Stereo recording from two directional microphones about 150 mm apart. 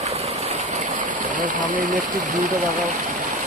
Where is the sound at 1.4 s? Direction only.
60° right (ahead or behind).